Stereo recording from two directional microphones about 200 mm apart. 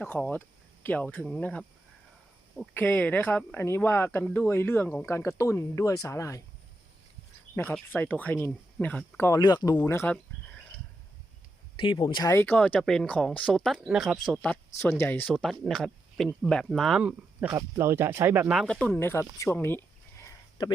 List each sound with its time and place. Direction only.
0.0 s speech: 5° left (ahead or behind)
7.5 s speech: 10° left (ahead or behind)
11.8 s speech: 25° left (ahead or behind)
12.3 s speech: 10° left (ahead or behind)
15.3 s speech: centre (ahead or behind)
19.4 s a sound: 10° left (ahead or behind)